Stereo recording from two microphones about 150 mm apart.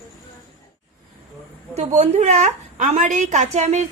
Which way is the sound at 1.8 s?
50° right (ahead or behind).